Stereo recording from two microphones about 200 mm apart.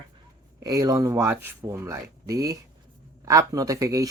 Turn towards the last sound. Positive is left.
turn(degrees=-15)  # may be behind; listen again after turning